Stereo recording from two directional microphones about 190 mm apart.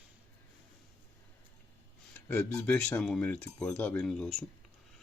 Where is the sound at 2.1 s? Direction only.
10° left (ahead or behind).